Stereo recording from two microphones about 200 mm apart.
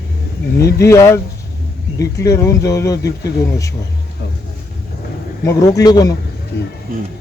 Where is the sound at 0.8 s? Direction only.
15° left (ahead or behind).